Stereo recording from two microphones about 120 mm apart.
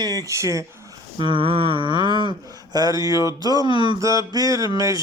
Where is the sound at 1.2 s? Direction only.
45° right (ahead or behind).